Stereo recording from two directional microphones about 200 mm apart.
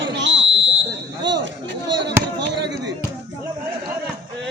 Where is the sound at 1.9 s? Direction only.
60° right (ahead or behind).